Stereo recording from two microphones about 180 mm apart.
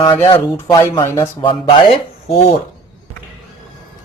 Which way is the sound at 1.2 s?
30° left (ahead or behind).